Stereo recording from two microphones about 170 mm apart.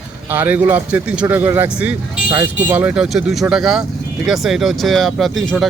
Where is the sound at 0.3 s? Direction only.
10° right (ahead or behind).